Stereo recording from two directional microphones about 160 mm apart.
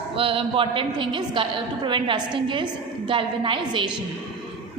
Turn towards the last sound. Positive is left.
turn(degrees=-30)  # may be behind; listen again after turning